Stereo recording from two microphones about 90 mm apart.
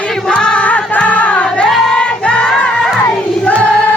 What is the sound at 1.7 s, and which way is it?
Music, 5° left (ahead or behind).